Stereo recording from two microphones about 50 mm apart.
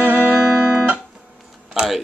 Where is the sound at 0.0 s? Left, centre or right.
Right.